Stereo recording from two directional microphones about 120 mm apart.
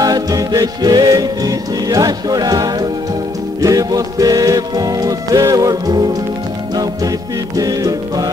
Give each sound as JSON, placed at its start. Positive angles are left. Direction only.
{"t": 0.0, "sound": "music", "side_deg": -30}